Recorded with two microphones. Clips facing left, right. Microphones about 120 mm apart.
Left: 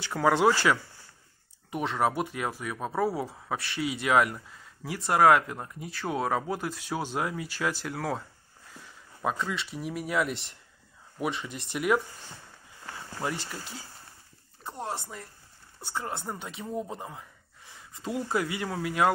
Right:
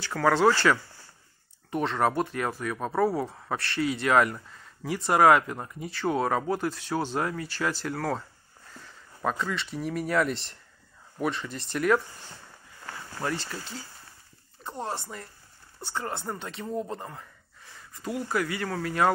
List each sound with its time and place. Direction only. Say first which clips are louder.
0.0 s speech: right 1 dB; 15° left (ahead or behind)
14.6 s a sound: right 1 dB; centre (ahead or behind)
15.9 s speech: right 1 dB; centre (ahead or behind)
17.6 s speech: right 1 dB; 25° left (ahead or behind)
18.7 s speech: right 1 dB; 5° left (ahead or behind)